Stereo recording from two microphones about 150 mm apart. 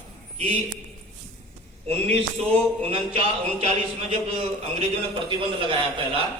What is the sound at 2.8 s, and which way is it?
A man's voice, 40° right (ahead or behind).